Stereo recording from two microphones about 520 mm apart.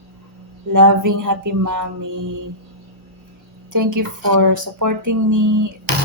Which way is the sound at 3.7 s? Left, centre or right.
Right.